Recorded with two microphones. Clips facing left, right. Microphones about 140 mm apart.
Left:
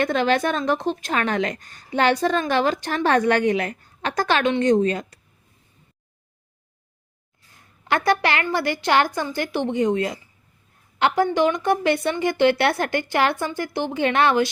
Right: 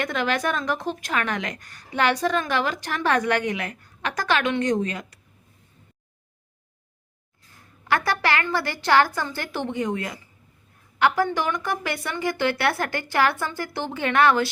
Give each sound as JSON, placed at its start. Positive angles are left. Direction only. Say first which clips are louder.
{"t": 0.0, "sound": "a woman's voice", "louder": "left 5 dB", "side_deg": 30}
{"t": 7.9, "sound": "a woman's voice", "louder": "left 3 dB", "side_deg": 20}